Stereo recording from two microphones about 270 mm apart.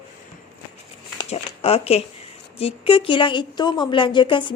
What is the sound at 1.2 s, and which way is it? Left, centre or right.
A woman's voice, left.